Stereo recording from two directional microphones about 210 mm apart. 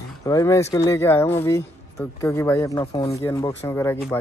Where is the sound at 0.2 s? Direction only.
15° left (ahead or behind).